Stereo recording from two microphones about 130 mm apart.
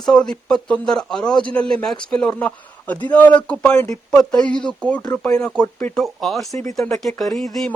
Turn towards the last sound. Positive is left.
turn(degrees=0)  # may be behind; listen again after turning